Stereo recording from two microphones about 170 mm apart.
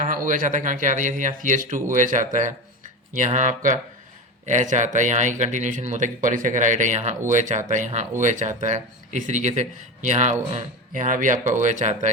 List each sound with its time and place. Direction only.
0.0 s speech: 50° right (ahead or behind)